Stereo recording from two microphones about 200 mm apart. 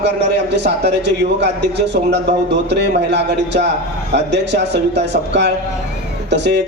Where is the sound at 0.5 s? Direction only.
60° right (ahead or behind).